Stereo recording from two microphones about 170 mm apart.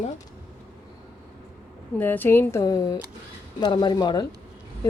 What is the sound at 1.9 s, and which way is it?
Speech, 10° left (ahead or behind).